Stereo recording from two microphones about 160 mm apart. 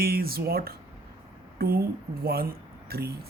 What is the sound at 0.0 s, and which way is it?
Speech, 70° right (ahead or behind).